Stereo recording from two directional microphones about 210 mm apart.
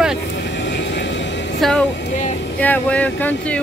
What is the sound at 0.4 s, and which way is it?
Vehicle, 55° left (ahead or behind).